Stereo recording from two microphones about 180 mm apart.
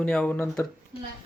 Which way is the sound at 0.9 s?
30° left (ahead or behind).